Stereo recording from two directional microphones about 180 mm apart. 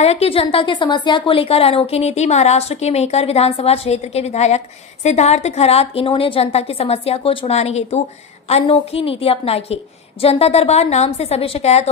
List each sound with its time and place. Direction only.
0.0 s a woman's voice: 35° left (ahead or behind)